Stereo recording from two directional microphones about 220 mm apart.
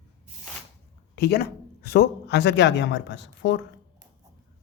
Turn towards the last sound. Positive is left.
turn(degrees=55)  # may be behind; listen again after turning